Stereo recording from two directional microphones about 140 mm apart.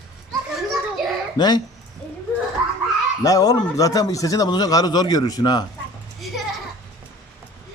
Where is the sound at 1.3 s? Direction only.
30° left (ahead or behind).